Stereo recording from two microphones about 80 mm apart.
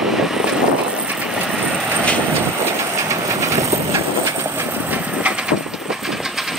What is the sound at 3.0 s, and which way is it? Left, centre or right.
Train, right.